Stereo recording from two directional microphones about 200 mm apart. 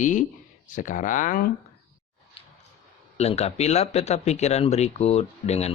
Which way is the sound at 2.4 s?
25° left (ahead or behind).